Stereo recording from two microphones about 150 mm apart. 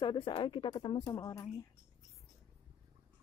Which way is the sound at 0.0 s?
35° left (ahead or behind).